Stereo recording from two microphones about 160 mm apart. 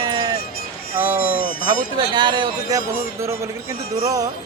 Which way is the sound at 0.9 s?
15° right (ahead or behind).